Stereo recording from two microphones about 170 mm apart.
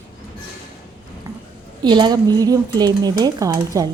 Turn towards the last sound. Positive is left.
turn(degrees=-20)  # may be behind; listen again after turning